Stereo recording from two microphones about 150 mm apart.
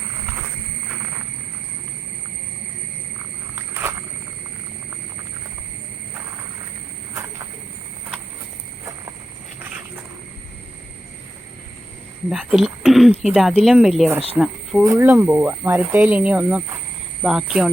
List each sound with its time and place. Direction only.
3.5 s walk: 15° right (ahead or behind)
12.3 s speech: 5° right (ahead or behind)
14.8 s speech: 20° right (ahead or behind)
15.1 s speech: 5° right (ahead or behind)